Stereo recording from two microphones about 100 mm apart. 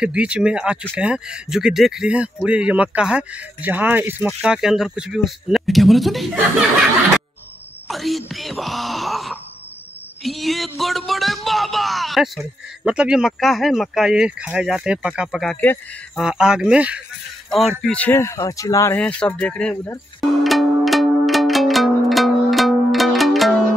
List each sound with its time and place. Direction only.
0.0 s speech: 10° right (ahead or behind)
4.3 s speech: 5° right (ahead or behind)
7.9 s speech: centre (ahead or behind)
17.5 s speech: centre (ahead or behind)
18.1 s speech: 30° left (ahead or behind)
18.9 s speech: 15° left (ahead or behind)
20.4 s music: centre (ahead or behind)